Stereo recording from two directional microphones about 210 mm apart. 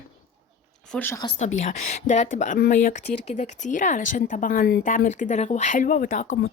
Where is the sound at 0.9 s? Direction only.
10° left (ahead or behind).